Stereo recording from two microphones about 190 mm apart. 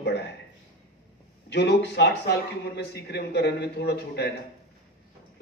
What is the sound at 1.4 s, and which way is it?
A man's voice, 65° left (ahead or behind).